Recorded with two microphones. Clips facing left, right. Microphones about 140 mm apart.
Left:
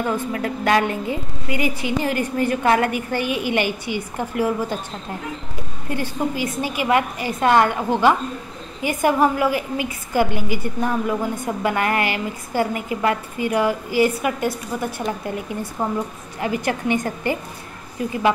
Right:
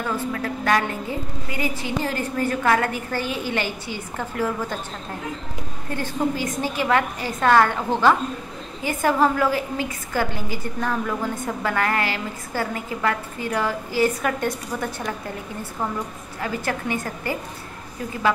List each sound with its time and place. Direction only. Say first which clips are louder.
0.1 s a woman's voice: left 2 dB; 20° left (ahead or behind)
5.9 s a woman's voice: even; 15° left (ahead or behind)